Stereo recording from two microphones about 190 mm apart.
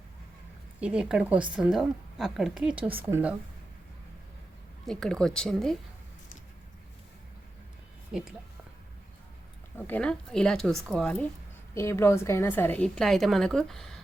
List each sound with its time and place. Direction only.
0.8 s a woman's voice: 5° right (ahead or behind)
4.9 s a woman's voice: 5° left (ahead or behind)
9.7 s a woman's voice: 10° left (ahead or behind)